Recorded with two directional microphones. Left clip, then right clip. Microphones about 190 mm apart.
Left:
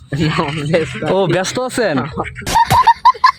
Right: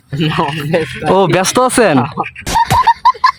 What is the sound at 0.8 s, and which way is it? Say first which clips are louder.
Speech: right 4 dB; 25° right (ahead or behind).